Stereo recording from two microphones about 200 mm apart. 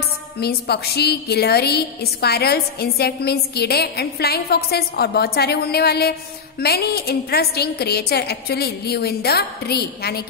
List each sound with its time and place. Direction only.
0.4 s a woman's voice: 55° left (ahead or behind)